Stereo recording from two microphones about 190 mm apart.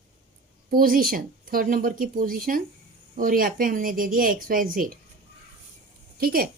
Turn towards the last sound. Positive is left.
turn(degrees=-50)  # may be behind; listen again after turning